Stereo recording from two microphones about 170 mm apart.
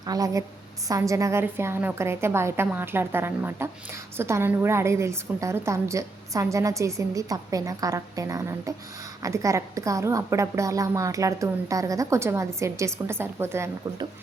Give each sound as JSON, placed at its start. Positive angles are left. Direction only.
{"t": 0.0, "sound": "a woman's voice", "side_deg": -20}